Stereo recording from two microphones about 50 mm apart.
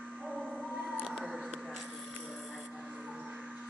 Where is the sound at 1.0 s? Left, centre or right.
Centre.